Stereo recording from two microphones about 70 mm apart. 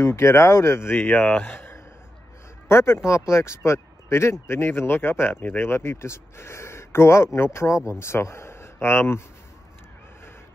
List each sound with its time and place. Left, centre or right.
0.0 s speech: left